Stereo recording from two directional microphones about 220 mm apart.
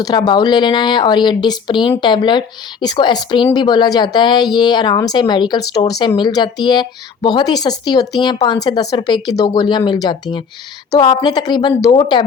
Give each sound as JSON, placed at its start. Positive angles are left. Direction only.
{"t": 0.0, "sound": "speech", "side_deg": 20}